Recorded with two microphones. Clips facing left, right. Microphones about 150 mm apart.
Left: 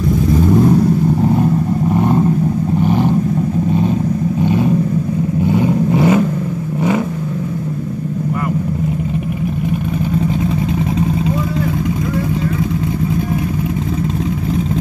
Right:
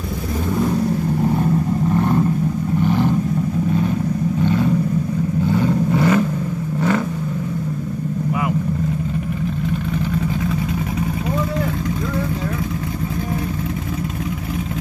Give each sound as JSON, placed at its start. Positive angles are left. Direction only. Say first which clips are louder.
{"t": 2.0, "sound": "vehicle", "louder": "left 5 dB", "side_deg": 20}
{"t": 4.4, "sound": "vehicle", "louder": "left 3 dB", "side_deg": 20}